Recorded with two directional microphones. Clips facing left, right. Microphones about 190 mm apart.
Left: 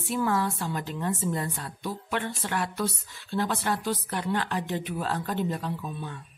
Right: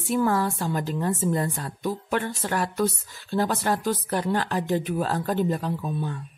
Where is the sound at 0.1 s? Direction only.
45° right (ahead or behind).